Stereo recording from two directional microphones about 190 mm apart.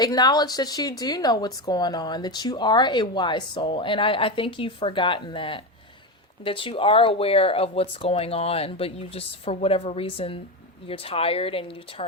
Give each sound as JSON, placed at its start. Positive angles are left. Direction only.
{"t": 0.0, "sound": "speech", "side_deg": 20}